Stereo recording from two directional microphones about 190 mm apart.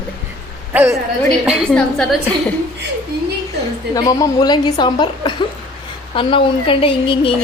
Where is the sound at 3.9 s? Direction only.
20° left (ahead or behind).